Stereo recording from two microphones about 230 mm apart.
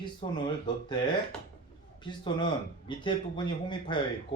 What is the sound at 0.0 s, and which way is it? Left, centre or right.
Speech, centre.